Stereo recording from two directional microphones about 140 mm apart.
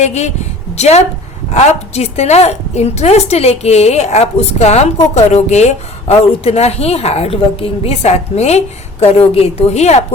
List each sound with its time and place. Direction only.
0.0 s a woman's voice: 55° left (ahead or behind)